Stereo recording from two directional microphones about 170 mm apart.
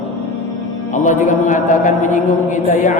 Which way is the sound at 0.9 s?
45° left (ahead or behind).